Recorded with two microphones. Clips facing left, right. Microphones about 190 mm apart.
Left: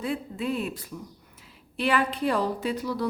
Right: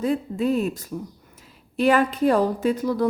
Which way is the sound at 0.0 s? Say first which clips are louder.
Right 7 dB; 40° right (ahead or behind).